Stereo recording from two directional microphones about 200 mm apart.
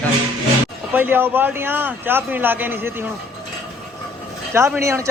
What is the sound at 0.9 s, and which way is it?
A man's voice, 10° right (ahead or behind).